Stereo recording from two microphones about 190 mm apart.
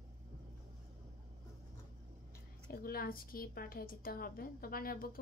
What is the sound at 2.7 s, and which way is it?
Speech, 50° left (ahead or behind).